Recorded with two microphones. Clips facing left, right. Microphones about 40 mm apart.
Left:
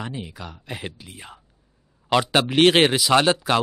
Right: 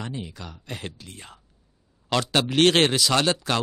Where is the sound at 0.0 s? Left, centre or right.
Centre.